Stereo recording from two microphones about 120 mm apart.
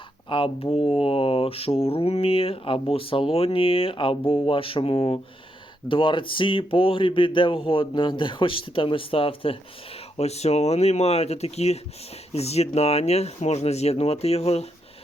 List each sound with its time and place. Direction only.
0.3 s speech: 45° left (ahead or behind)